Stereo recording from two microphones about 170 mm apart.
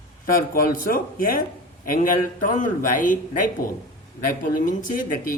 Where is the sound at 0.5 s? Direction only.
55° left (ahead or behind).